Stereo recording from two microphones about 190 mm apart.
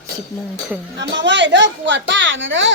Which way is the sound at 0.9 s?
70° right (ahead or behind).